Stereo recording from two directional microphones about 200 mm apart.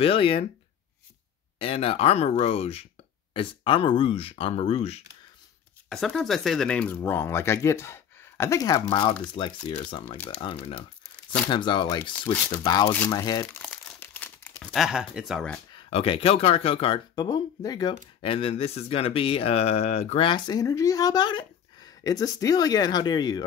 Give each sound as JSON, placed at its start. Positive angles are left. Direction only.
{"t": 0.0, "sound": "speech", "side_deg": 30}
{"t": 1.6, "sound": "speech", "side_deg": 30}
{"t": 5.9, "sound": "speech", "side_deg": 0}
{"t": 10.0, "sound": "speech", "side_deg": 5}
{"t": 10.4, "sound": "speech", "side_deg": 25}
{"t": 13.6, "sound": "crumpling", "side_deg": 5}
{"t": 15.7, "sound": "speech", "side_deg": 30}